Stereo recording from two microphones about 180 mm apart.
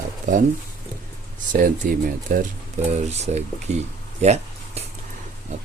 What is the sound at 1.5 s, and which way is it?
Speech, 50° right (ahead or behind).